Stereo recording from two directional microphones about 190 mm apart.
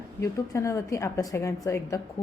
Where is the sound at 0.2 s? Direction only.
15° left (ahead or behind).